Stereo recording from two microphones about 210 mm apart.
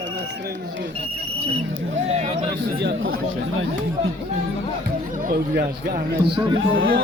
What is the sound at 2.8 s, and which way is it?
Speech, 70° right (ahead or behind).